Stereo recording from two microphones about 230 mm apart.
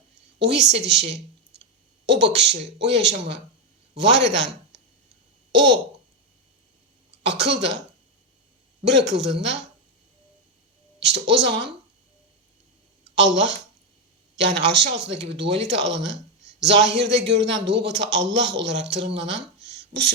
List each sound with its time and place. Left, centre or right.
0.3 s a man's voice: right
7.3 s a man's voice: right
8.8 s a man's voice: right
11.0 s a man's voice: right
13.1 s a man's voice: right
19.2 s a sound: right